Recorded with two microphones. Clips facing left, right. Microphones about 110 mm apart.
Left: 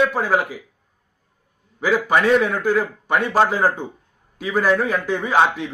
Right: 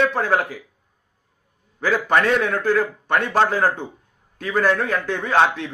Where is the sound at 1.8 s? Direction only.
10° left (ahead or behind).